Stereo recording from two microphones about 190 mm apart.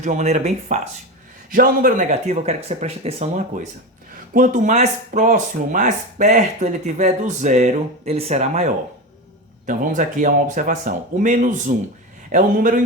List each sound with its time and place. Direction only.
0.0 s speech: 40° right (ahead or behind)
1.5 s speech: 50° right (ahead or behind)